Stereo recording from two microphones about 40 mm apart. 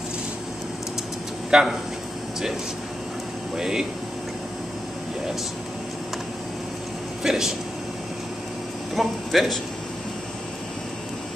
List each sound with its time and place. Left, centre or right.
1.5 s speech: centre
3.5 s speech: centre
7.2 s speech: centre
8.9 s speech: centre